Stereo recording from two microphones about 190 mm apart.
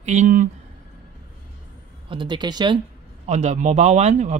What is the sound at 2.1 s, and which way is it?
Speech, 25° right (ahead or behind).